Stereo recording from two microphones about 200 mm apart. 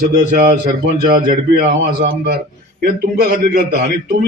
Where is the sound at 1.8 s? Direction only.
55° right (ahead or behind).